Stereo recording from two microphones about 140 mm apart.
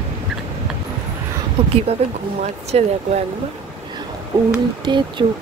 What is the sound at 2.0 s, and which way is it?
Speech, 50° right (ahead or behind).